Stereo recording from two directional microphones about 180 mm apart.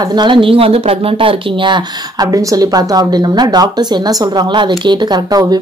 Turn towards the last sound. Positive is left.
turn(degrees=-20)  # may be behind; listen again after turning